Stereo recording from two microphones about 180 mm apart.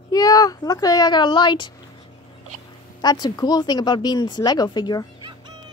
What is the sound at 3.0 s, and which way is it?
Speech, 20° left (ahead or behind).